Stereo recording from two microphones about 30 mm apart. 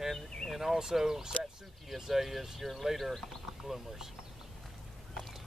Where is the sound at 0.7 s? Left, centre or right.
Centre.